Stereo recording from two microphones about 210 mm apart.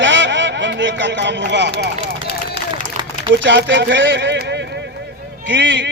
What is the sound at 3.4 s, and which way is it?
Speech, 60° right (ahead or behind).